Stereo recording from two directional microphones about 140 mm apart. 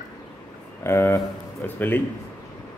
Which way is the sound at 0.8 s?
20° left (ahead or behind).